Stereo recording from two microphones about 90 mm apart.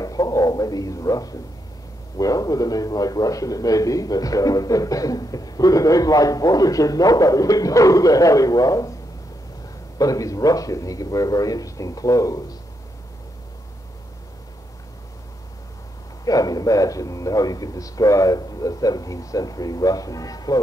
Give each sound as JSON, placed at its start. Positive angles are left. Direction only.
{"t": 0.0, "sound": "a man's voice", "side_deg": 40}
{"t": 9.9, "sound": "a man's voice", "side_deg": 40}
{"t": 16.3, "sound": "a man's voice", "side_deg": 45}